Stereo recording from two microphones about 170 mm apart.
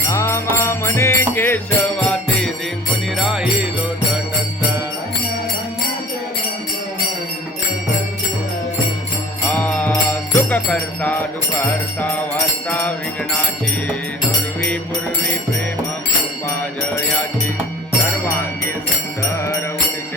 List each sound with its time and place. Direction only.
0.1 s music: 15° left (ahead or behind); by 3.7 s 5° right (ahead or behind)
9.5 s music: 10° left (ahead or behind)
12.6 s music: 10° left (ahead or behind)